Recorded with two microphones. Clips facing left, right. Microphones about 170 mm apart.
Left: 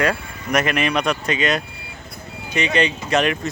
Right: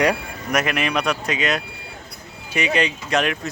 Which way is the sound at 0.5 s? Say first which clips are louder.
Left 2 dB; centre (ahead or behind).